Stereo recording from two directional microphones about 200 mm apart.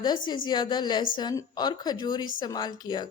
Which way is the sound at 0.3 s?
20° left (ahead or behind).